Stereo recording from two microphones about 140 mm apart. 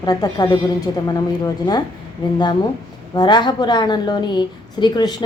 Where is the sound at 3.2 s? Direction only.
30° left (ahead or behind).